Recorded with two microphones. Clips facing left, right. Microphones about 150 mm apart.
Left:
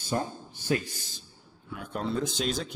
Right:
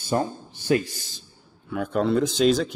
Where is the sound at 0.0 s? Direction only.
80° right.